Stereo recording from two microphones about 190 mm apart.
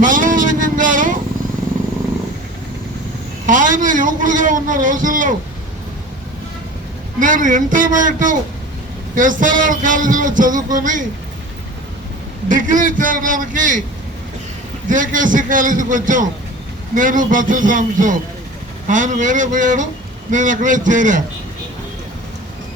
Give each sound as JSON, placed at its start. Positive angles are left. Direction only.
{"t": 0.0, "sound": "vehicle", "side_deg": -45}
{"t": 3.4, "sound": "a man's voice", "side_deg": -45}
{"t": 7.2, "sound": "a man's voice", "side_deg": -45}
{"t": 12.5, "sound": "a man's voice", "side_deg": -45}
{"t": 14.8, "sound": "a man's voice", "side_deg": -45}